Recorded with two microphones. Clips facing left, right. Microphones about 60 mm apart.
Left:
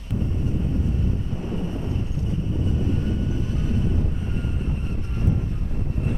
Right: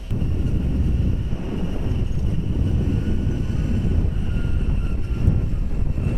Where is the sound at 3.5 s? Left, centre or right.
Right.